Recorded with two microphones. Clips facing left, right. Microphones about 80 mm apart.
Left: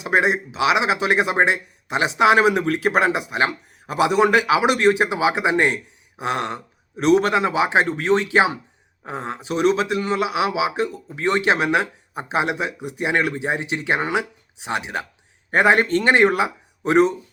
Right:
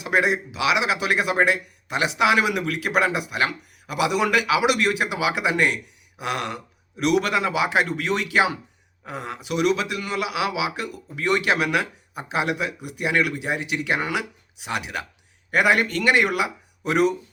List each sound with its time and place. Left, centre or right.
0.0 s speech: left